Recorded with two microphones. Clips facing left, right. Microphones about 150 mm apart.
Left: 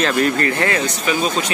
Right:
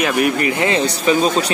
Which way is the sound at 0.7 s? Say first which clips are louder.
Right 4 dB; 30° right (ahead or behind).